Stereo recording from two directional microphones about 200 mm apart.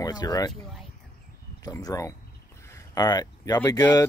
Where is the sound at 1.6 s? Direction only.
20° left (ahead or behind).